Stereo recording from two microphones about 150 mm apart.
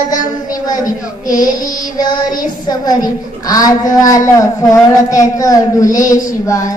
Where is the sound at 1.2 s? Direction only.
65° left (ahead or behind).